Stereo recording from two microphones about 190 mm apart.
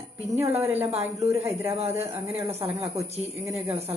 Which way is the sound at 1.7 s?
35° right (ahead or behind).